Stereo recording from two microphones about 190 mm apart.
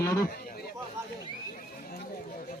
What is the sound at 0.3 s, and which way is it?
Speech, 50° left (ahead or behind).